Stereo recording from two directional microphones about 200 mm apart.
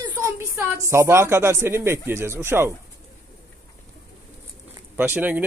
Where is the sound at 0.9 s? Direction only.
15° right (ahead or behind).